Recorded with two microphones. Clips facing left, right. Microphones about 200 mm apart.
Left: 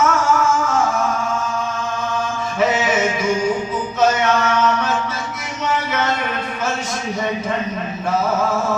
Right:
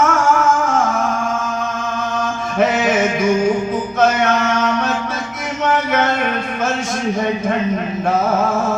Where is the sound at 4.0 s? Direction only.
55° right (ahead or behind).